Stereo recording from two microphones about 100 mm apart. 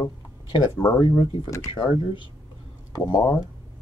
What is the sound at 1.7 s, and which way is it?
Speech, 60° left (ahead or behind).